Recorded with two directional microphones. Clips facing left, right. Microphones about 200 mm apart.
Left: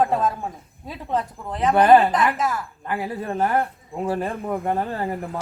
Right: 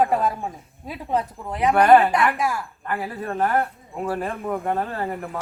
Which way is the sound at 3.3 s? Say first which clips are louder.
Even; 20° left (ahead or behind).